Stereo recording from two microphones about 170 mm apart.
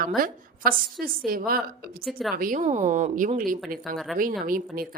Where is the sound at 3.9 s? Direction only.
Centre (ahead or behind).